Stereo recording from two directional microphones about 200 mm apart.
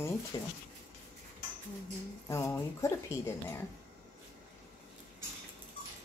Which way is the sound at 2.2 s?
15° left (ahead or behind).